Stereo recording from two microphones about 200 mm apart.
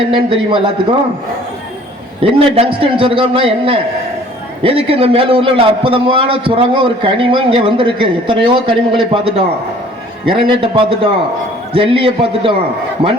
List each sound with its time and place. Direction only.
0.1 s a man's voice: 25° right (ahead or behind)
2.2 s a man's voice: 30° right (ahead or behind)